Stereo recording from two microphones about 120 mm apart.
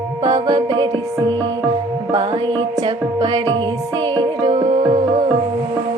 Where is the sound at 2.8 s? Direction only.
35° right (ahead or behind).